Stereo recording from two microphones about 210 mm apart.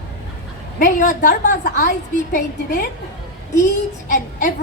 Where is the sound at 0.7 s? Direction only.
40° left (ahead or behind).